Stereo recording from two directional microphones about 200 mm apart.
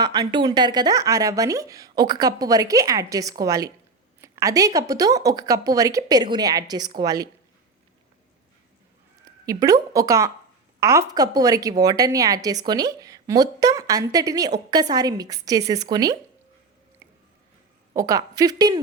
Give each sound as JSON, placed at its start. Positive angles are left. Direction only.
{"t": 0.0, "sound": "a woman's voice", "side_deg": -20}
{"t": 9.5, "sound": "a woman's voice", "side_deg": -15}
{"t": 17.9, "sound": "a woman's voice", "side_deg": -15}